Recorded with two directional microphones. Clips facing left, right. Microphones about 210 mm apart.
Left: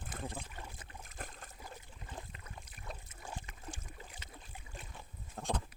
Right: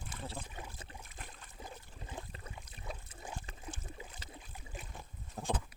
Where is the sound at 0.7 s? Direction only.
30° right (ahead or behind).